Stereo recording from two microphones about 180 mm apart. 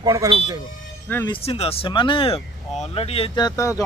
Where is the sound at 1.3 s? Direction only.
35° left (ahead or behind).